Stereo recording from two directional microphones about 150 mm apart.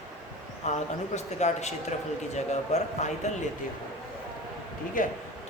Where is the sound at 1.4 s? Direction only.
50° left (ahead or behind).